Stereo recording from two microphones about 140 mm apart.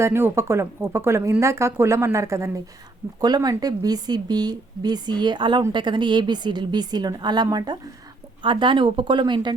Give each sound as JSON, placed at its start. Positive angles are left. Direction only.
{"t": 0.0, "sound": "a woman's voice", "side_deg": -15}